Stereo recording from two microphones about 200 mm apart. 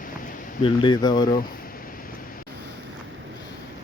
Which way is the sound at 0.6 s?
20° left (ahead or behind).